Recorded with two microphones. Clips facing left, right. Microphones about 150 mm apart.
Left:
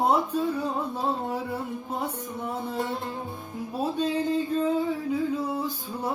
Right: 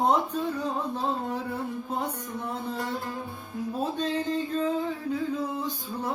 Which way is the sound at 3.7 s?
10° left (ahead or behind).